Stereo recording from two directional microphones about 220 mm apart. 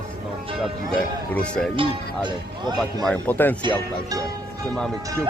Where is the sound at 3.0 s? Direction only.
5° left (ahead or behind).